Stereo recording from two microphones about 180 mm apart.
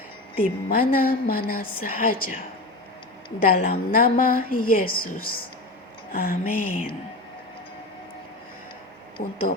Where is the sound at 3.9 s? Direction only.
50° left (ahead or behind).